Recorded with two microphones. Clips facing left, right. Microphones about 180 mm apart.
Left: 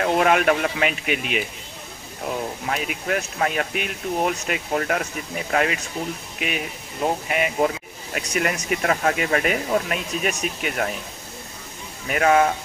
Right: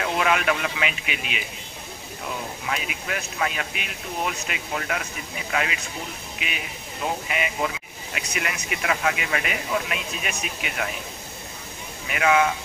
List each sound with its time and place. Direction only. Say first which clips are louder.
0.0 s speech: left 5 dB; 45° left (ahead or behind)
2.6 s speech: left 4 dB; 45° left (ahead or behind)
12.1 s speech: left 3 dB; 45° left (ahead or behind)